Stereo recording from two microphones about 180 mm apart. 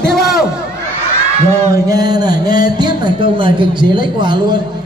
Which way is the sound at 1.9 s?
20° right (ahead or behind).